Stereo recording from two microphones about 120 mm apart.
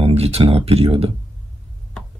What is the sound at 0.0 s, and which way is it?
Speech, 55° right (ahead or behind).